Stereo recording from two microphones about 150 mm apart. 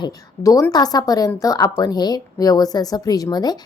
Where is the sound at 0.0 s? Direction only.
20° left (ahead or behind).